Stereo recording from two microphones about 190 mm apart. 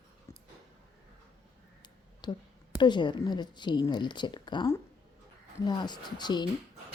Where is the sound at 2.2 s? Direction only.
20° left (ahead or behind).